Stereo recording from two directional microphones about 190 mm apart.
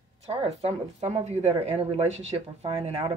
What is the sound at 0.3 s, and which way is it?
Speech, 35° right (ahead or behind).